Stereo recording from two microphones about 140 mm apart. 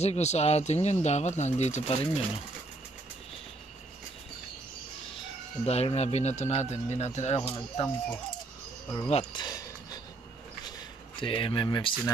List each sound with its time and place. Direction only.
0.0 s speech: 50° left (ahead or behind)
5.7 s speech: 50° left (ahead or behind)
9.1 s speech: 35° left (ahead or behind)
11.1 s speech: 40° left (ahead or behind)